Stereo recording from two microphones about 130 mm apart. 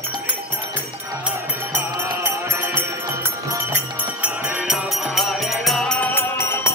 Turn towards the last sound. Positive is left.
turn(degrees=20)  # may be behind; listen again after turning